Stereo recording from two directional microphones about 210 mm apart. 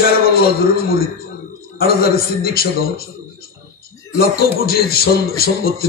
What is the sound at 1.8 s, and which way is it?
Speech, 45° left (ahead or behind).